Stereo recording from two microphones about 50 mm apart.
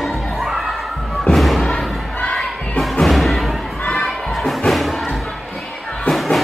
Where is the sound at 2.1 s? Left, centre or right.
Left.